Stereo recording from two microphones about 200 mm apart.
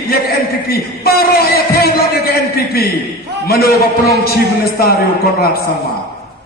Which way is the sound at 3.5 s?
50° left (ahead or behind).